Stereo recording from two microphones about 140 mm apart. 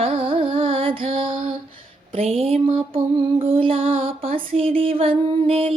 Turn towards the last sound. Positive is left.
turn(degrees=-45)  # may be behind; listen again after turning